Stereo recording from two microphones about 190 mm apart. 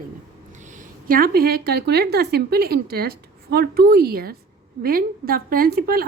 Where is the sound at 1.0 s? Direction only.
50° right (ahead or behind).